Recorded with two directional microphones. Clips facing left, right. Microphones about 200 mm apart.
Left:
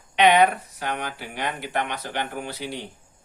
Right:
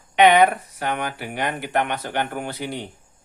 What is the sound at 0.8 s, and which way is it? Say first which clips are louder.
Speech: right 4 dB; 55° right (ahead or behind).